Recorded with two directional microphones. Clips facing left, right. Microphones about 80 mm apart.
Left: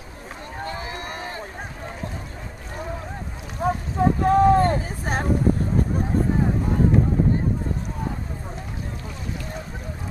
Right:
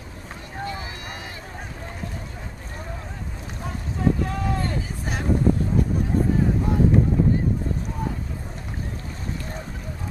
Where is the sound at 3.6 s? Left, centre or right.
Left.